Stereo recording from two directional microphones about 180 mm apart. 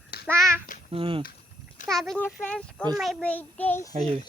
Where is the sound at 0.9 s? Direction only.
30° right (ahead or behind).